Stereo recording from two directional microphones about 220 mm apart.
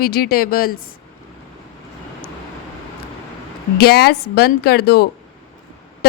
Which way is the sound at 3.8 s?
45° left (ahead or behind).